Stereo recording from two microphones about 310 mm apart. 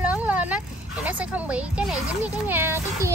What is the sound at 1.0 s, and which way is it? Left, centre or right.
A child's voice, centre.